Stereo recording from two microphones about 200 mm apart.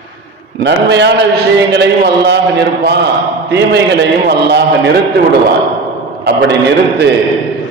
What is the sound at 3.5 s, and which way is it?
A man's voice, 55° right (ahead or behind).